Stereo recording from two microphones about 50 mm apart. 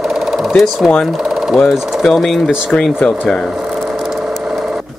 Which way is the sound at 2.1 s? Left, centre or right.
Centre.